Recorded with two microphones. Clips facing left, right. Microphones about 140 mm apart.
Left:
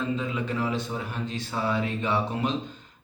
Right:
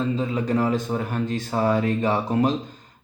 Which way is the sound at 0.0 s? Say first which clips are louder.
Right 5 dB; 35° right (ahead or behind).